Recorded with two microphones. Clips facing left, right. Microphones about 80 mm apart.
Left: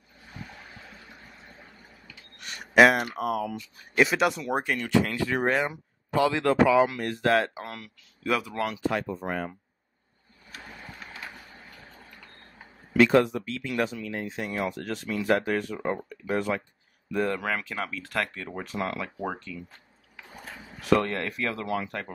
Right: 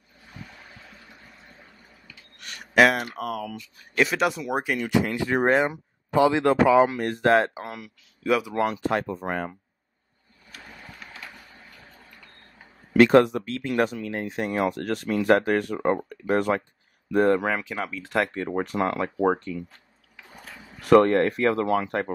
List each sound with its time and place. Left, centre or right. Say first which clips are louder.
2.4 s a sound: left 1 dB; centre
3.2 s speech: left 2 dB; centre
4.9 s speech: right 1 dB; centre
6.7 s speech: right 3 dB; right
7.6 s speech: right 3 dB; centre
8.7 s speech: right 3 dB; right
12.9 s speech: right 4 dB; right
17.3 s speech: right 7 dB; right
18.4 s speech: right 7 dB; right
18.9 s speech: right 9 dB; right
20.8 s speech: right 8 dB; right